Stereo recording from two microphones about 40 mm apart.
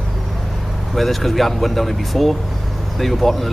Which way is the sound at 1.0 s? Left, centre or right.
Centre.